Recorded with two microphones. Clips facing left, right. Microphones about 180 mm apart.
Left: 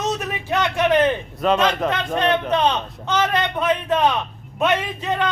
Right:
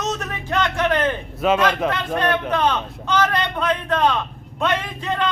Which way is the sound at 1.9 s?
20° left (ahead or behind).